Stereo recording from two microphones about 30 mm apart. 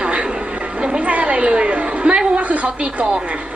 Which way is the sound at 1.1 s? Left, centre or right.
Right.